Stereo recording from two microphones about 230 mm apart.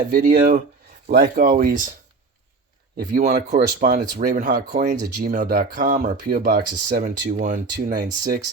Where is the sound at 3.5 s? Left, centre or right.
Right.